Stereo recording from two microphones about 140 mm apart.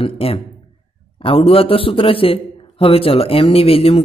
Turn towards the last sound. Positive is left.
turn(degrees=45)  # may be behind; listen again after turning